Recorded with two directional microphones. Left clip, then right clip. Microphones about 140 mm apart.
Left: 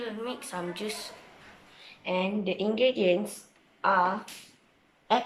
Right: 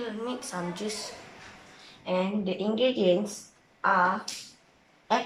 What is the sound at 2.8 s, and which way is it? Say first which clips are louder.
Speech: even; 5° right (ahead or behind).